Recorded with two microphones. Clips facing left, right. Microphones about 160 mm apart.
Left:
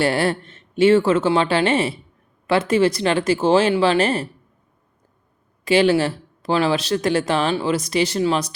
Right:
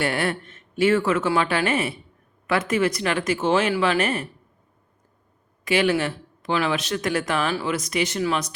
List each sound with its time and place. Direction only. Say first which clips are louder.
0.0 s speech: left 5 dB; 30° left (ahead or behind)
5.6 s speech: left 5 dB; 30° left (ahead or behind)